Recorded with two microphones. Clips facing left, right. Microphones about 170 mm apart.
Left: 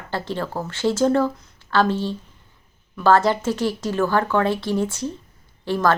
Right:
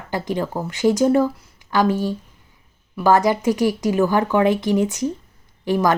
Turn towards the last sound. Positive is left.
turn(degrees=-15)  # may be behind; listen again after turning